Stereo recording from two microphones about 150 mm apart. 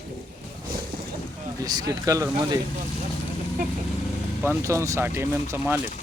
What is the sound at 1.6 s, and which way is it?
Speech, 25° right (ahead or behind).